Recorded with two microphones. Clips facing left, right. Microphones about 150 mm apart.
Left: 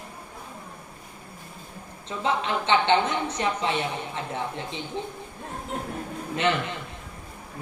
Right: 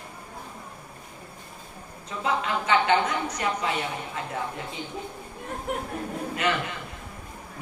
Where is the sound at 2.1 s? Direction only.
25° left (ahead or behind).